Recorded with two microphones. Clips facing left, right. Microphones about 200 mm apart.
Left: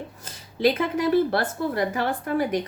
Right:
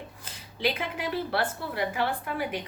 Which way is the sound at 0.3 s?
40° left (ahead or behind).